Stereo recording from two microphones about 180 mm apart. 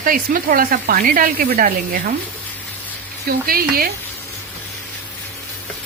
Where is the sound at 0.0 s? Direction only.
50° right (ahead or behind).